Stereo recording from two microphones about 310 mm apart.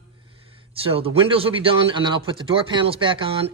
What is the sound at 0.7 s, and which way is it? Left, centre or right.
Speech, centre.